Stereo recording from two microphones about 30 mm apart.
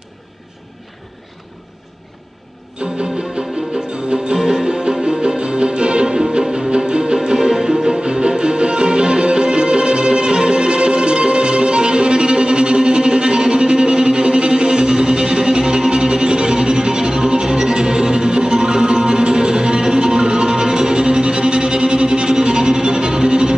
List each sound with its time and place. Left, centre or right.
2.8 s music: right